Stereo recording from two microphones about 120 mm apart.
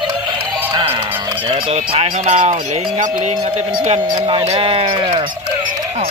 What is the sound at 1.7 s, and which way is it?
Speech, 60° right (ahead or behind).